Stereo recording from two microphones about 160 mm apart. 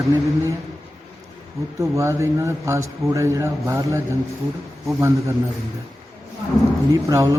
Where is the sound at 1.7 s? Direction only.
20° right (ahead or behind).